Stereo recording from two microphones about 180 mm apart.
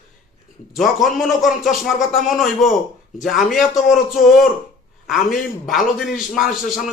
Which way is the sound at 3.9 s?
45° left (ahead or behind).